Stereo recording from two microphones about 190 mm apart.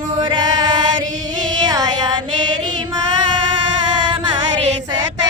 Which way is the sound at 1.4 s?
20° right (ahead or behind).